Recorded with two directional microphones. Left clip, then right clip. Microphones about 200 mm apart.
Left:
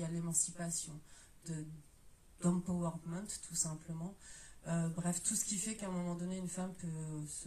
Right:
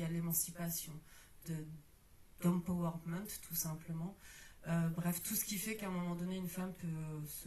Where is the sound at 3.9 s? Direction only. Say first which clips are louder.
Even; 25° right (ahead or behind).